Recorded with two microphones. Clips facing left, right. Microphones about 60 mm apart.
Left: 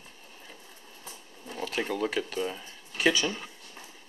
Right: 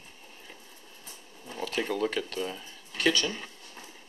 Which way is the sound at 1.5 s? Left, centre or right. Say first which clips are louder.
Even; centre.